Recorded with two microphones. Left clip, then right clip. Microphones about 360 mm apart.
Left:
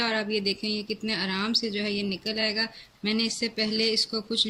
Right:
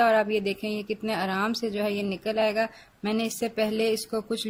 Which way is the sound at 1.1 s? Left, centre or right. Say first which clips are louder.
Right 1 dB; centre.